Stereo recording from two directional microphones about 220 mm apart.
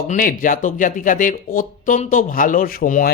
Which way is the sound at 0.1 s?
40° left (ahead or behind).